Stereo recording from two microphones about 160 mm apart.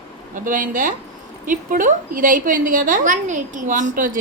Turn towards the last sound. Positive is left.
turn(degrees=-60)  # may be behind; listen again after turning